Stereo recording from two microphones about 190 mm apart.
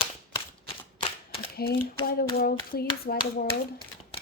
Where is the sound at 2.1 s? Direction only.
50° left (ahead or behind).